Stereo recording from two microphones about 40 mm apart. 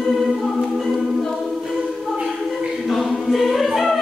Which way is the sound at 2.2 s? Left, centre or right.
Centre.